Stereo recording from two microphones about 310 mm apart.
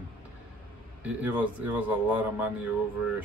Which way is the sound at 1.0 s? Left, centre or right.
Centre.